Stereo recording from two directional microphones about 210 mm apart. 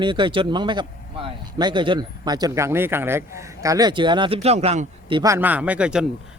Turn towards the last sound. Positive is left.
turn(degrees=-5)  # may be behind; listen again after turning